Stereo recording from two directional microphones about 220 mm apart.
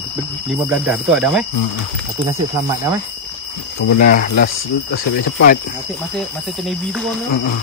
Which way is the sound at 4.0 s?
40° left (ahead or behind).